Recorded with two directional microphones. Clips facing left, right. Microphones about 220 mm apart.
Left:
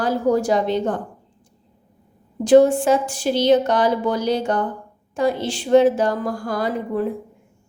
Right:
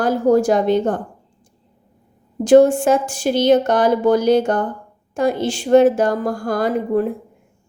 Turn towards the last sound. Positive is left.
turn(degrees=-50)  # may be behind; listen again after turning